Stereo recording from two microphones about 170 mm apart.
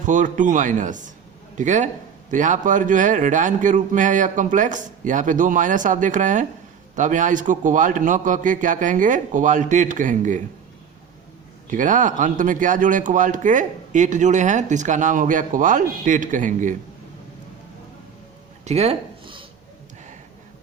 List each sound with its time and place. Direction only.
0.0 s a man's voice: 50° right (ahead or behind)
11.7 s a man's voice: 50° right (ahead or behind)
18.6 s a sound: 40° right (ahead or behind)